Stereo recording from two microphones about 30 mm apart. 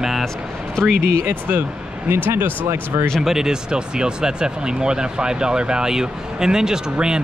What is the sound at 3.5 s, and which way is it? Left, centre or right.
Speech, right.